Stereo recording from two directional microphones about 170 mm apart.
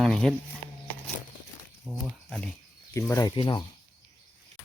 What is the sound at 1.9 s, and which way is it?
Speech, centre (ahead or behind).